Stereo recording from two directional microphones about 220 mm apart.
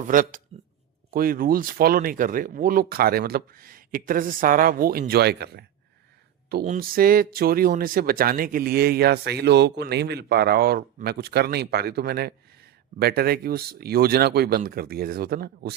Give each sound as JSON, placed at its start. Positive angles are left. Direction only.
{"t": 0.1, "sound": "speech", "side_deg": -35}